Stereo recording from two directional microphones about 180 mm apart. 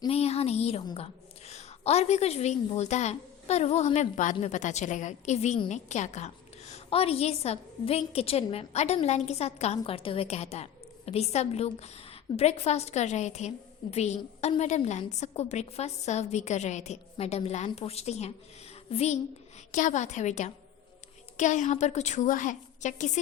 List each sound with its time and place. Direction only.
0.1 s a woman's voice: 35° left (ahead or behind)